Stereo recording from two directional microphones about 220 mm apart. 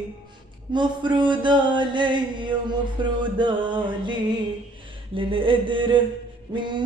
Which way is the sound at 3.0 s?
20° right (ahead or behind).